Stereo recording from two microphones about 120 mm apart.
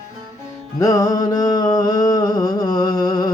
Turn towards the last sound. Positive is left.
turn(degrees=35)  # may be behind; listen again after turning